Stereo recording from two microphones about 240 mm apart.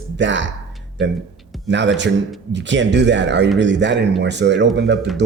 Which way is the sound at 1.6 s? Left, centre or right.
Right.